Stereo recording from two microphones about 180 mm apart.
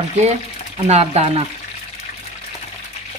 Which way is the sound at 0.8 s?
35° right (ahead or behind).